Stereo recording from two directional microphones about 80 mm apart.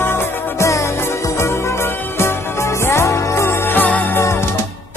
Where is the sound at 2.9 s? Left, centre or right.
Left.